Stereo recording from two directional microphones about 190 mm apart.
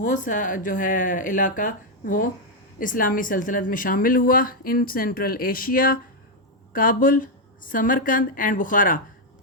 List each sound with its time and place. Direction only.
0.0 s speech: 45° left (ahead or behind)